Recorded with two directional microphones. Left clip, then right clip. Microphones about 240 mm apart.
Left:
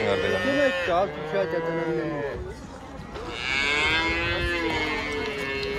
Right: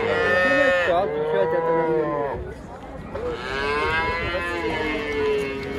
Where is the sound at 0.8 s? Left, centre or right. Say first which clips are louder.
Right 4 dB; left.